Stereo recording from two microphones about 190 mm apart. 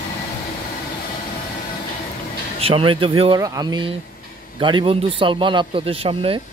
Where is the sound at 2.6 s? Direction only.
30° right (ahead or behind).